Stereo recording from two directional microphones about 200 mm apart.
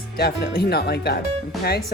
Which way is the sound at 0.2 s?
55° left (ahead or behind).